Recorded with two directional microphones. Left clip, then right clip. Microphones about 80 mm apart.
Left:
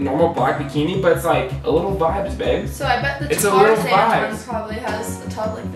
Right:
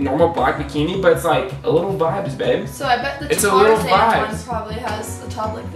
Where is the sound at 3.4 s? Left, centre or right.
Centre.